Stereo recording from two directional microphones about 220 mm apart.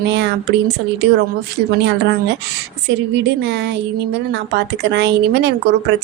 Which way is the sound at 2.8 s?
50° right (ahead or behind).